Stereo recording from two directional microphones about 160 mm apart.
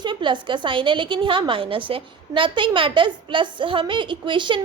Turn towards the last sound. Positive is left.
turn(degrees=-30)  # may be behind; listen again after turning